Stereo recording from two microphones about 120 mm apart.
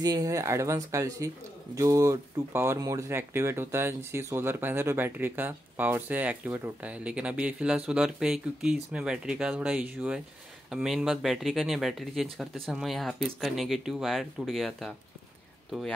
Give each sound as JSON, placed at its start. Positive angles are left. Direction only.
{"t": 0.0, "sound": "speech", "side_deg": -30}